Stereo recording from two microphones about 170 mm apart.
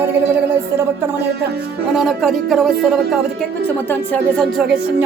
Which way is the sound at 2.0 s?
Centre (ahead or behind).